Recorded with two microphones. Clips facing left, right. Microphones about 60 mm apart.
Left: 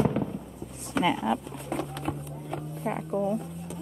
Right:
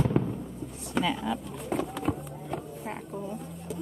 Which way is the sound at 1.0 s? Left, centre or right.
Centre.